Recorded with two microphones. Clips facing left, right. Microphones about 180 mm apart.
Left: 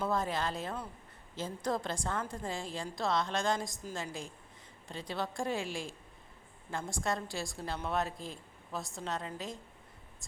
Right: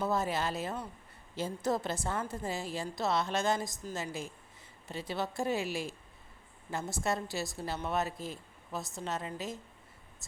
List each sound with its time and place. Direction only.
0.0 s a woman's voice: 5° right (ahead or behind)